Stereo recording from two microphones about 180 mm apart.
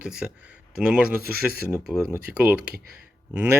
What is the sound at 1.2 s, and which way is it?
Speech, 60° right (ahead or behind).